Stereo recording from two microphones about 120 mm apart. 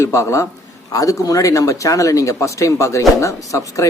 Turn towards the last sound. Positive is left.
turn(degrees=25)  # may be behind; listen again after turning